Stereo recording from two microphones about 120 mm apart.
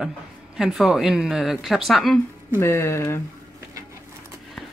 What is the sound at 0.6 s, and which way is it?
Speech, 5° right (ahead or behind).